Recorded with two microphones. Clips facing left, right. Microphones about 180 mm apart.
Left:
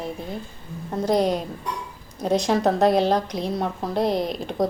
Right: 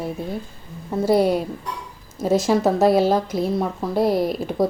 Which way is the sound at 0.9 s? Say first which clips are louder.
Right 3 dB; 5° right (ahead or behind).